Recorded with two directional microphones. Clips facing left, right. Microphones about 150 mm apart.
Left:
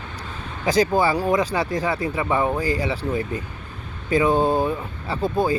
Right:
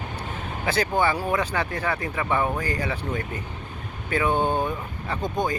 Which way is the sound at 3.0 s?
30° left (ahead or behind).